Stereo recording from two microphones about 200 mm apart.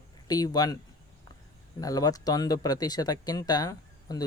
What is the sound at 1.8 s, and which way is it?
Speech, 20° left (ahead or behind).